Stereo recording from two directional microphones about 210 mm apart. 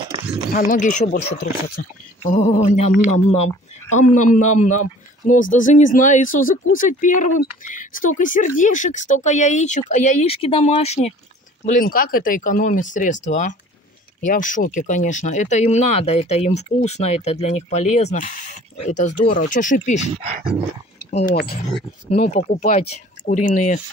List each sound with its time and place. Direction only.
0.7 s speech: 40° left (ahead or behind)
21.1 s speech: 30° left (ahead or behind)